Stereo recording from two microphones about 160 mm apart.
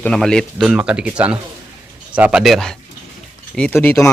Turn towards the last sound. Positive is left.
turn(degrees=15)  # may be behind; listen again after turning